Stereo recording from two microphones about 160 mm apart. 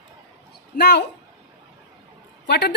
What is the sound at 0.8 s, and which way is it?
Speech, 90° left.